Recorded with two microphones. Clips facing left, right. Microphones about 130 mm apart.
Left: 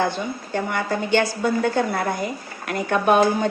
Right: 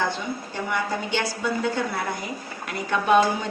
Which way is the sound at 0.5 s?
50° left (ahead or behind).